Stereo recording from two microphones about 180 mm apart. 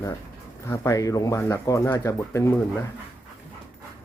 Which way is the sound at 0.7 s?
15° left (ahead or behind).